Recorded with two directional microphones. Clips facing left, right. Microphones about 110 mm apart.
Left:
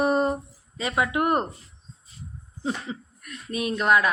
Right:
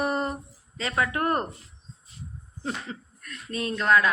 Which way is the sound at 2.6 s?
15° left (ahead or behind).